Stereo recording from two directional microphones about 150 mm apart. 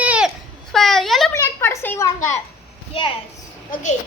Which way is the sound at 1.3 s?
20° left (ahead or behind).